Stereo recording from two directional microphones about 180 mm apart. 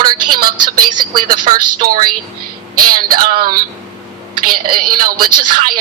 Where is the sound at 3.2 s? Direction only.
55° right (ahead or behind).